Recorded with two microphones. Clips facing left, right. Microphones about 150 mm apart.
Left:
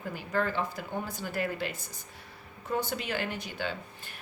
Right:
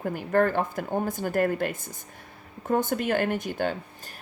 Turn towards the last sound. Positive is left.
turn(degrees=-50)  # may be behind; listen again after turning